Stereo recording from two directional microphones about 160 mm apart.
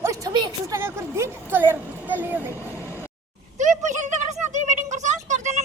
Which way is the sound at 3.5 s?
50° right (ahead or behind).